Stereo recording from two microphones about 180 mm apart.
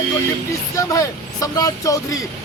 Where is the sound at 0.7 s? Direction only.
20° left (ahead or behind).